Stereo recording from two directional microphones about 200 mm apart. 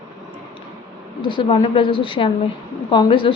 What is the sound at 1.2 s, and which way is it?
Speech, 25° left (ahead or behind).